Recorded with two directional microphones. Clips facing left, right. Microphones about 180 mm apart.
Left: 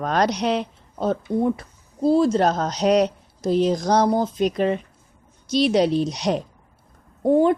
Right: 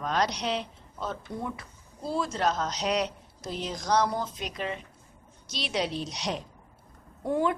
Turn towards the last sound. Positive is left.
turn(degrees=30)  # may be behind; listen again after turning